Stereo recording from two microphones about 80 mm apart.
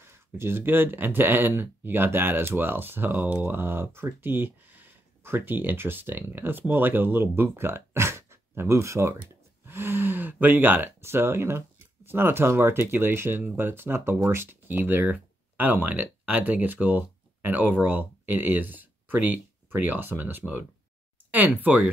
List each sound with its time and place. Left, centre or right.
0.0 s speech: right